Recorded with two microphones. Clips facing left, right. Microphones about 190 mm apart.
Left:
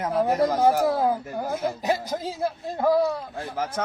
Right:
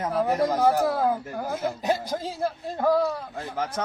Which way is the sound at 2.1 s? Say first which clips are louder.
Left 1 dB; 10° left (ahead or behind).